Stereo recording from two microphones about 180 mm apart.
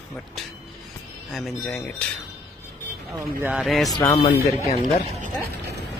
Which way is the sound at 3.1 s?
15° right (ahead or behind).